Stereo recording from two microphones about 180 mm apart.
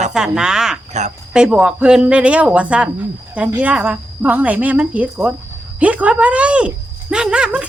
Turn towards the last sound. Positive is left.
turn(degrees=-5)  # may be behind; listen again after turning